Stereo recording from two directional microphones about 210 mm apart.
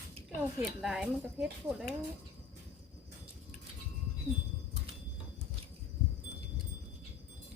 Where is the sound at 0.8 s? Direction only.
Centre (ahead or behind).